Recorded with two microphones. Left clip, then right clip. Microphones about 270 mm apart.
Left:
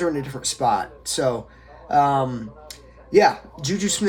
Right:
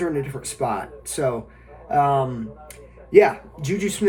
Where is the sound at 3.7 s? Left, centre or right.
Centre.